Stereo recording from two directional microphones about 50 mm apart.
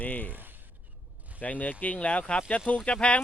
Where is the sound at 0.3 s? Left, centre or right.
Right.